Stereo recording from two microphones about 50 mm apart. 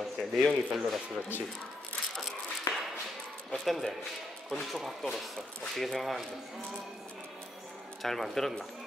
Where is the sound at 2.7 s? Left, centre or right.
Left.